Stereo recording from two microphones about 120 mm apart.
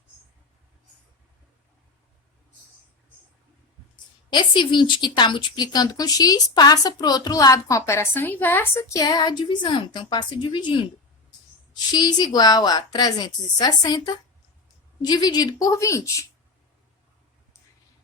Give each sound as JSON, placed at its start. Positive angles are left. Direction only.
{"t": 3.9, "sound": "speech", "side_deg": 40}